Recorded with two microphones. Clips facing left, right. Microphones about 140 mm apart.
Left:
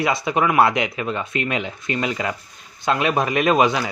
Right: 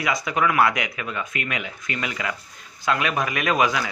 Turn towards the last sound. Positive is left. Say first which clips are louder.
# left 5 dB
turn(degrees=25)  # may be behind; listen again after turning